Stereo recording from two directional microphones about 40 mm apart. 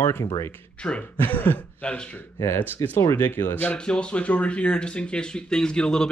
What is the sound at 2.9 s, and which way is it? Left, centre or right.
Speech, left.